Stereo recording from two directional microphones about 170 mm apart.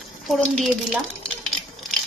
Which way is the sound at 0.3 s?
5° left (ahead or behind).